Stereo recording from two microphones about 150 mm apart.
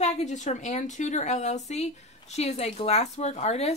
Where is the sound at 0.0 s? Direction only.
50° left (ahead or behind).